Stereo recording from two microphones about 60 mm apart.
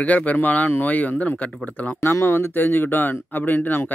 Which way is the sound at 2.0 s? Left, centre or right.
Left.